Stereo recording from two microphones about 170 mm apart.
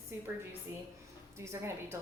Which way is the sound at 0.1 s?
10° right (ahead or behind).